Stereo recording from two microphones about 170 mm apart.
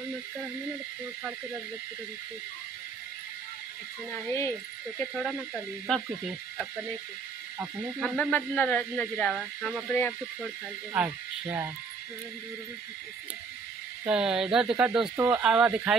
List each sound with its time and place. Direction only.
4.3 s speech: 15° left (ahead or behind)
5.9 s speech: centre (ahead or behind)
8.0 s speech: 10° left (ahead or behind)
10.9 s speech: 5° right (ahead or behind)
14.0 s speech: 5° right (ahead or behind)